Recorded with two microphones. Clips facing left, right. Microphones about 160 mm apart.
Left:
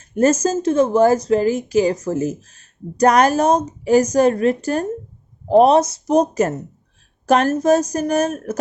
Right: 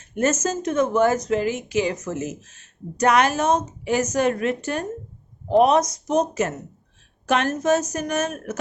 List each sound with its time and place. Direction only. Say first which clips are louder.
0.1 s speech: left 6 dB; 35° left (ahead or behind)